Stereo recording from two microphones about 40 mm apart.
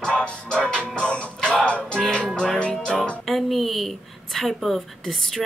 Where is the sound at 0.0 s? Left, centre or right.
Left.